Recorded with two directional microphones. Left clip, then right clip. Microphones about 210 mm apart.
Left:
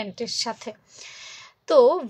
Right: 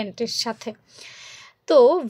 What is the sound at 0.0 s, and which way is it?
A woman's voice, 25° right (ahead or behind).